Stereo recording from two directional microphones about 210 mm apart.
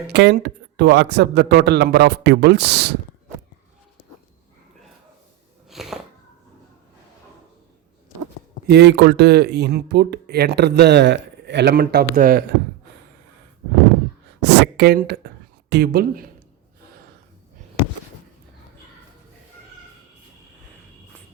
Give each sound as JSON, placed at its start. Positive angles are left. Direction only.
{"t": 0.1, "sound": "speech", "side_deg": -55}
{"t": 5.6, "sound": "a sound", "side_deg": 0}
{"t": 8.6, "sound": "speech", "side_deg": -55}
{"t": 14.4, "sound": "a woman's voice", "side_deg": -55}